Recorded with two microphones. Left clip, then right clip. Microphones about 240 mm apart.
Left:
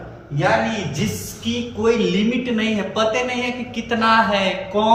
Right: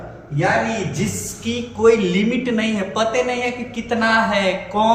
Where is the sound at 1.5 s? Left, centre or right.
Centre.